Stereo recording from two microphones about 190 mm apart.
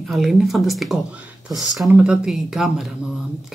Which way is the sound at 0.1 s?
Centre (ahead or behind).